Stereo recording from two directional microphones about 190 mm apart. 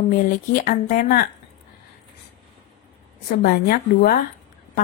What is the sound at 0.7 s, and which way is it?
Speech, 45° left (ahead or behind).